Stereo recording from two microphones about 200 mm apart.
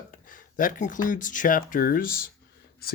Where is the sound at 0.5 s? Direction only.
40° left (ahead or behind).